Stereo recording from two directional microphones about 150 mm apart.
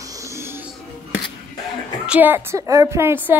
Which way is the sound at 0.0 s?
20° right (ahead or behind).